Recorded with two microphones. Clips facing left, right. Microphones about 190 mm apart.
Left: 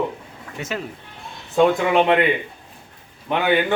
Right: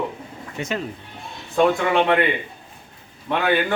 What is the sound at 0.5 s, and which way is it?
Speech, 5° left (ahead or behind).